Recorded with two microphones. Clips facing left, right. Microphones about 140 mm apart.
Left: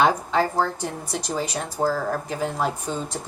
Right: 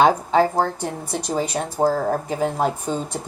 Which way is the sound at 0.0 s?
50° right (ahead or behind).